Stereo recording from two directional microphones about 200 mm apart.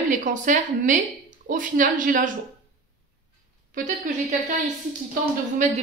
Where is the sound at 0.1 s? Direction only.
40° right (ahead or behind).